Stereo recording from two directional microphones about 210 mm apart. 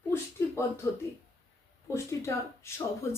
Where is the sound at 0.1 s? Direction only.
10° left (ahead or behind).